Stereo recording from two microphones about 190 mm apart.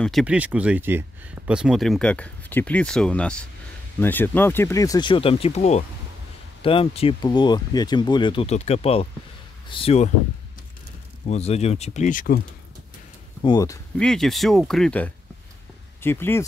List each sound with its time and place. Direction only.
0.0 s speech: centre (ahead or behind); by 10.1 s 35° left (ahead or behind)
11.2 s speech: 35° left (ahead or behind)
13.4 s speech: 20° left (ahead or behind)
13.9 s speech: centre (ahead or behind)